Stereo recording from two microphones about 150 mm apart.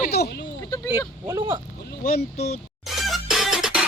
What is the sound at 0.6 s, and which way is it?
Speech, 25° left (ahead or behind).